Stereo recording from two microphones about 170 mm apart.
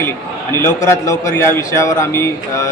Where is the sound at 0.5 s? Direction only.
15° left (ahead or behind).